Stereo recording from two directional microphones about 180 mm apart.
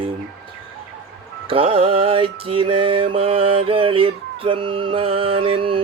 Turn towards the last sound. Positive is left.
turn(degrees=-30)  # may be behind; listen again after turning